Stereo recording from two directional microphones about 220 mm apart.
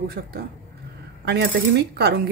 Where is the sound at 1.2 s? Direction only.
50° right (ahead or behind).